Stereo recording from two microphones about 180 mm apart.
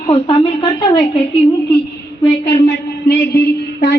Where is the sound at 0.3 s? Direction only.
30° left (ahead or behind).